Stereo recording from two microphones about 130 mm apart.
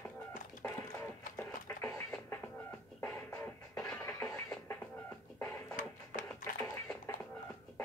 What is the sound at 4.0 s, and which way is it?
Music, 10° left (ahead or behind).